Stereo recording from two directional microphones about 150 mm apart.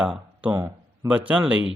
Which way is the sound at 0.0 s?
5° right (ahead or behind).